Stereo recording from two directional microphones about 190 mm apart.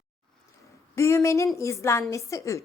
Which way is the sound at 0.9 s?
15° left (ahead or behind).